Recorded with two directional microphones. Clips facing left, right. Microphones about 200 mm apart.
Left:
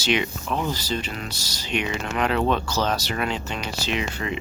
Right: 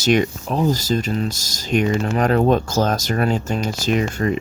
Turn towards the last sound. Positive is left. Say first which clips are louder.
# right 8 dB
turn(degrees=-45)  # may be behind; listen again after turning